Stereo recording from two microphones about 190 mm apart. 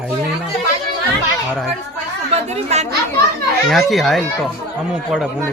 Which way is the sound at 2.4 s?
35° right (ahead or behind).